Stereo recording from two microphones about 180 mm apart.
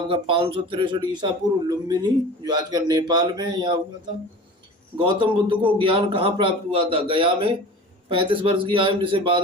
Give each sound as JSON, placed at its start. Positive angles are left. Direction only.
{"t": 0.1, "sound": "speech", "side_deg": -30}
{"t": 5.0, "sound": "speech", "side_deg": -30}